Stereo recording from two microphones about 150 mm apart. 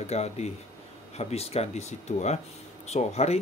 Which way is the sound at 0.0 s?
45° left (ahead or behind).